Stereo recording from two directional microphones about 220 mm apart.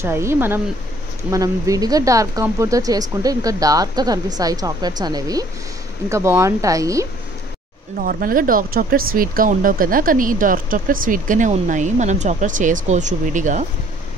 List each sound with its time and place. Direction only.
0.0 s speech: 10° right (ahead or behind)
8.0 s speech: 40° right (ahead or behind)